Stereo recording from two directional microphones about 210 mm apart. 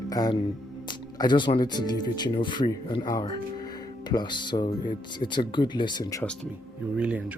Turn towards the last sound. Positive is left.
turn(degrees=-5)  # may be behind; listen again after turning